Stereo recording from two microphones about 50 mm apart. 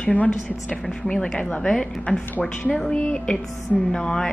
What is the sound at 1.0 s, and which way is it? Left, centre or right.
A woman's voice, centre.